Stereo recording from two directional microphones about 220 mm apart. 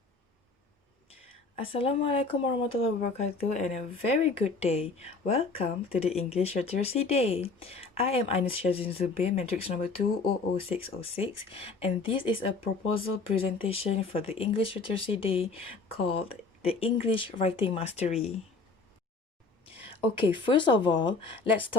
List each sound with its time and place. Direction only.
1.7 s speech: 25° left (ahead or behind)
19.6 s speech: 25° left (ahead or behind)